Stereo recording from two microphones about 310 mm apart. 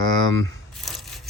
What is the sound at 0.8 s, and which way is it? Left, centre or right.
Wood, centre.